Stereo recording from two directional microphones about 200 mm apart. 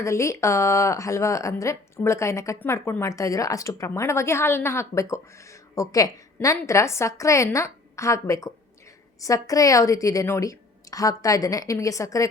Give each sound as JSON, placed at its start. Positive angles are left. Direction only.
{"t": 0.0, "sound": "speech", "side_deg": 15}